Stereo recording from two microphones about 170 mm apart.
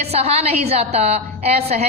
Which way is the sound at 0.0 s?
35° right (ahead or behind).